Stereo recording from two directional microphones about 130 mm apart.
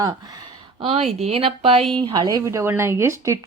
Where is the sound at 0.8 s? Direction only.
50° right (ahead or behind).